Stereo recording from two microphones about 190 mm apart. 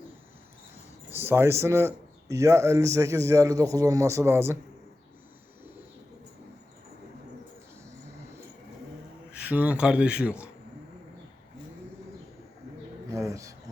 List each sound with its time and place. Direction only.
1.1 s speech: 10° right (ahead or behind)
9.3 s speech: 5° right (ahead or behind)
13.1 s speech: 15° right (ahead or behind)